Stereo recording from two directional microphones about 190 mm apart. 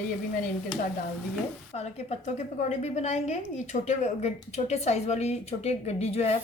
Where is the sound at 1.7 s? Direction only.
35° left (ahead or behind).